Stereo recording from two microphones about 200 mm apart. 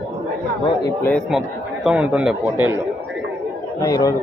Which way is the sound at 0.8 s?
10° left (ahead or behind).